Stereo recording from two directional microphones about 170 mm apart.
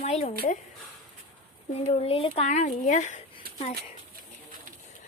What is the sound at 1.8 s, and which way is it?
Speech, 35° left (ahead or behind).